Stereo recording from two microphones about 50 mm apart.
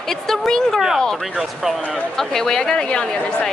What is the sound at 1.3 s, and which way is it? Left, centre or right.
Speech, centre.